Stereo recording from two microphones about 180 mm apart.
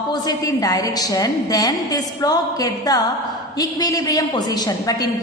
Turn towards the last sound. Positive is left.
turn(degrees=20)  # may be behind; listen again after turning